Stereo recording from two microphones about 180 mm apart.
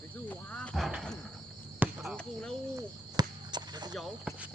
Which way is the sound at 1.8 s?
10° right (ahead or behind).